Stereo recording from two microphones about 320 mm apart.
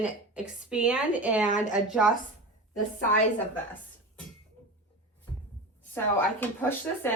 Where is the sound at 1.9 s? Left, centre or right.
Centre.